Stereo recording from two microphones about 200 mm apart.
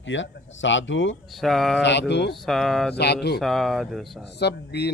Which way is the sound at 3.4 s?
Centre (ahead or behind).